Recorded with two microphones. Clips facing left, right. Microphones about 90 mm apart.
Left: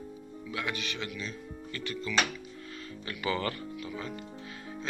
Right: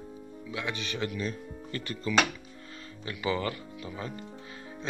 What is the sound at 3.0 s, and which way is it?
Speech, 15° right (ahead or behind).